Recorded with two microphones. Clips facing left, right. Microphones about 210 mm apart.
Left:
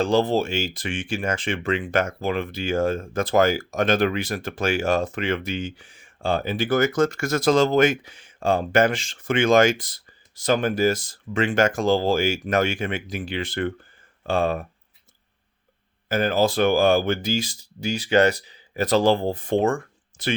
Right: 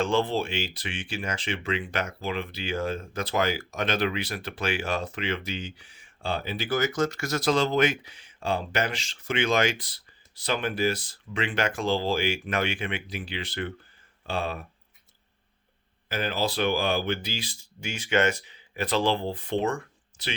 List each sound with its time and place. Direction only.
0.0 s speech: 40° left (ahead or behind)
16.0 s speech: 45° left (ahead or behind)